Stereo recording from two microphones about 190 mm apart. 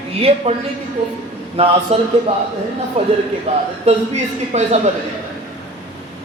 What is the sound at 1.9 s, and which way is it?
Speech, 35° right (ahead or behind).